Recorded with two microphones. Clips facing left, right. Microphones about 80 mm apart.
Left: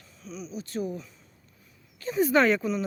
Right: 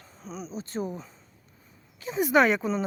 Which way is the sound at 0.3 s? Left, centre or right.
Right.